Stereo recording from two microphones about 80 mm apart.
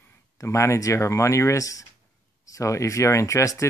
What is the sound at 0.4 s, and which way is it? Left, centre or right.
Speech, left.